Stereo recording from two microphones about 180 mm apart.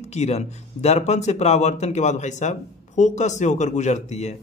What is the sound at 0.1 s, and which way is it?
A man's voice, 40° left (ahead or behind).